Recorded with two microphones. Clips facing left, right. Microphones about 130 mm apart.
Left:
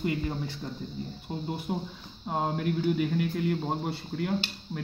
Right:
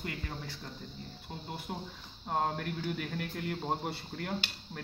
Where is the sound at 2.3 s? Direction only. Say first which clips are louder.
Left 4 dB; 10° left (ahead or behind).